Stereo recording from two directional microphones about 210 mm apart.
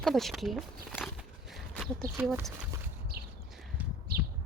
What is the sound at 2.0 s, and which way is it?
Speech, 45° right (ahead or behind).